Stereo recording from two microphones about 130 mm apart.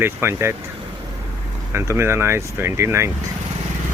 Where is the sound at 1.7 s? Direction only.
20° right (ahead or behind).